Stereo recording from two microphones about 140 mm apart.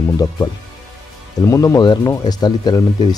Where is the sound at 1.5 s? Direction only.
25° left (ahead or behind).